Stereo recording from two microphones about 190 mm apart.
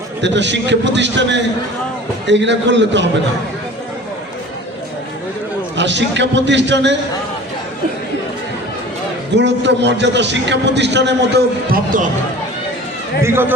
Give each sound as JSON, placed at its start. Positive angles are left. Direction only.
{"t": 0.2, "sound": "a man's voice", "side_deg": -70}
{"t": 5.7, "sound": "a man's voice", "side_deg": -70}
{"t": 9.3, "sound": "a man's voice", "side_deg": -65}
{"t": 13.2, "sound": "a man's voice", "side_deg": -10}